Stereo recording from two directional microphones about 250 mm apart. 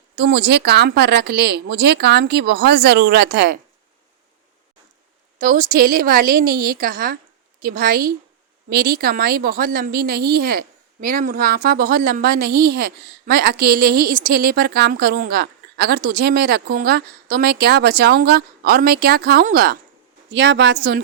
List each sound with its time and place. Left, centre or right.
0.2 s a woman's voice: right
5.4 s a woman's voice: right
20.3 s a woman's voice: right